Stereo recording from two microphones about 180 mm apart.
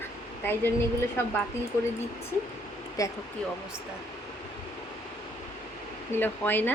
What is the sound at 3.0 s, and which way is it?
Speech, 20° left (ahead or behind).